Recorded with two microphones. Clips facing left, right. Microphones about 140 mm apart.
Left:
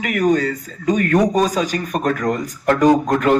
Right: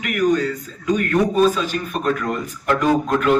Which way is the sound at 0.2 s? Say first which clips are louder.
Left 1 dB; 45° left (ahead or behind).